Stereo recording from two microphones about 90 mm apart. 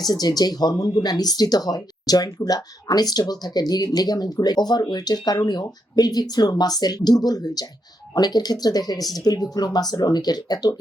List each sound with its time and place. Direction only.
0.0 s speech: 45° left (ahead or behind)